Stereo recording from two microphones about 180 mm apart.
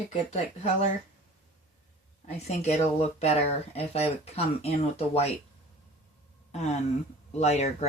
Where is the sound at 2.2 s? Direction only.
35° left (ahead or behind).